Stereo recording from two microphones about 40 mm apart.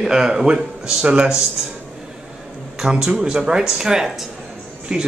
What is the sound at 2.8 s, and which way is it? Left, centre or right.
Speech, centre.